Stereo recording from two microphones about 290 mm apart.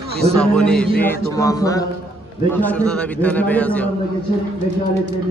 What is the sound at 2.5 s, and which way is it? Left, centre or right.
A man's voice, centre.